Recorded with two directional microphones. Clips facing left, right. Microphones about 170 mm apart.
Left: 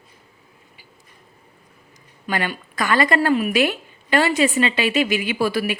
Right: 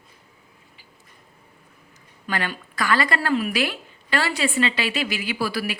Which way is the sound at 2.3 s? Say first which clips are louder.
Left 3 dB; 15° left (ahead or behind).